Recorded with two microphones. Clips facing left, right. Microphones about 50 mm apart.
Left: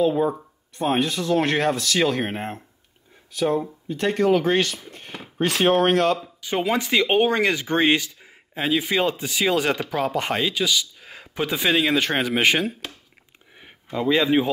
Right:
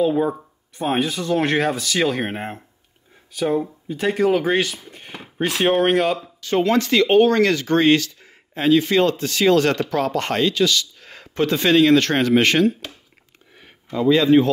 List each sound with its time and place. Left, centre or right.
0.0 s speech: centre
6.4 s speech: centre
13.6 s a sound: centre